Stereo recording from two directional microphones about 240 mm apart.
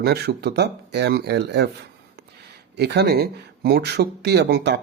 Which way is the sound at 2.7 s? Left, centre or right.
Right.